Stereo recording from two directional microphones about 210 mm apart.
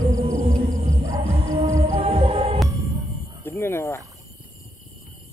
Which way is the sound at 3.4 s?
10° left (ahead or behind).